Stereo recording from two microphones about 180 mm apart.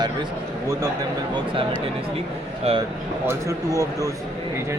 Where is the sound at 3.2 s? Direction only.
15° right (ahead or behind).